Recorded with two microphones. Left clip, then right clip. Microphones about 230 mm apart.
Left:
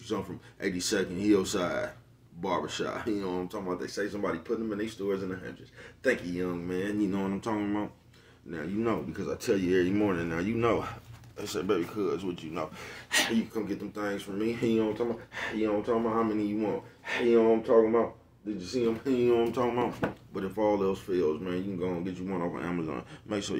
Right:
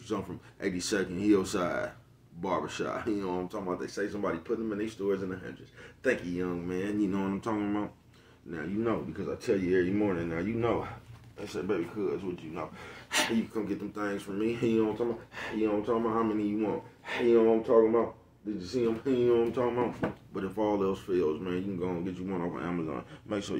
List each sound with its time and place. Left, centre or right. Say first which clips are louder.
0.1 s speech: left 1 dB; centre
9.1 s speech: left 1 dB; left
13.1 s speech: left 2 dB; centre
20.3 s speech: left 2 dB; centre